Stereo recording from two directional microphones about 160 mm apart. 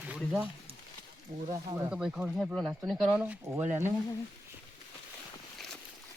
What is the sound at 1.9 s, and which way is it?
Speech, 5° right (ahead or behind).